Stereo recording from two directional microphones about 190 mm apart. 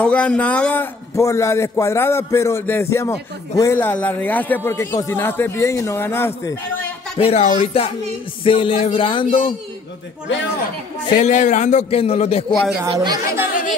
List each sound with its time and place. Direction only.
0.0 s a man's voice: 5° left (ahead or behind)
7.2 s a man's voice: 35° left (ahead or behind)
8.5 s music: 30° left (ahead or behind)
11.1 s a man's voice: 40° left (ahead or behind)
12.4 s speech: centre (ahead or behind)
12.9 s speech: 20° right (ahead or behind)